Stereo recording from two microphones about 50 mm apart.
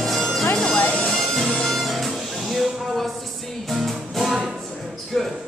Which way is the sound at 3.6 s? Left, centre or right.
Centre.